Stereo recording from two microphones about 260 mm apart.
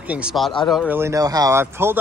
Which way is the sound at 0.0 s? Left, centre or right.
Centre.